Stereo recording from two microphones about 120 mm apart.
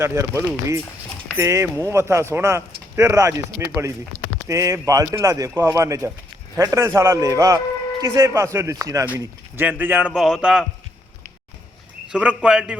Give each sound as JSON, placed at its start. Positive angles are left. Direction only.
{"t": 0.0, "sound": "speech", "side_deg": -20}
{"t": 9.1, "sound": "speech", "side_deg": -15}
{"t": 10.2, "sound": "a man's voice", "side_deg": 0}
{"t": 12.1, "sound": "speech", "side_deg": -10}